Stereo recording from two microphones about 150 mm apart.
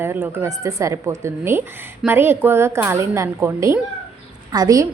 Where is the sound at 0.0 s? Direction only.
15° right (ahead or behind).